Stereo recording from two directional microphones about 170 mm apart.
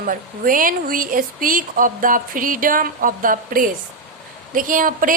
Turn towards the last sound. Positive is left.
turn(degrees=-55)  # may be behind; listen again after turning